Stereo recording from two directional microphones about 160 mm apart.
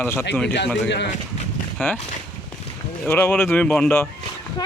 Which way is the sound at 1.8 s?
10° left (ahead or behind).